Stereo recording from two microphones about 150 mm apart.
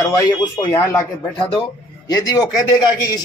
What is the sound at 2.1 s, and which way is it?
Speech, 25° left (ahead or behind).